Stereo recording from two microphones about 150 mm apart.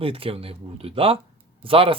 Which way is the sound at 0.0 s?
40° right (ahead or behind).